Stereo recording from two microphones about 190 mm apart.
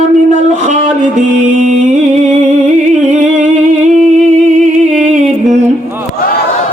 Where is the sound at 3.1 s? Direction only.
40° right (ahead or behind).